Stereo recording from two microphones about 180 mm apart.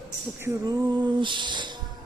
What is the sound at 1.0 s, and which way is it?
Speech, 25° right (ahead or behind).